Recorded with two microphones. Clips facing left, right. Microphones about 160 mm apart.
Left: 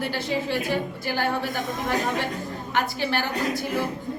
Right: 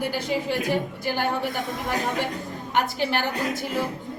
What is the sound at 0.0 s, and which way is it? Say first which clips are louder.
Speech: right 1 dB; 15° right (ahead or behind).